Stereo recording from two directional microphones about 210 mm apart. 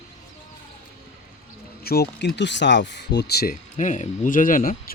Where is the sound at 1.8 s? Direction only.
50° left (ahead or behind).